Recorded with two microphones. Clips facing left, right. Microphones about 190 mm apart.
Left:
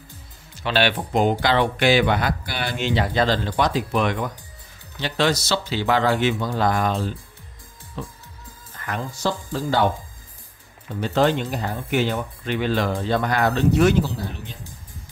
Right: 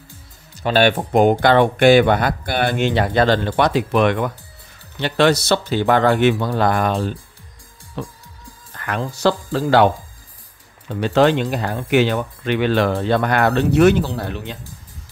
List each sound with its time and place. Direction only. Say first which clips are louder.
0.6 s speech: right 6 dB; 45° right (ahead or behind); by 8.1 s 65° right (ahead or behind)
8.7 s speech: right 5 dB; 80° right
10.9 s speech: right 5 dB; 85° right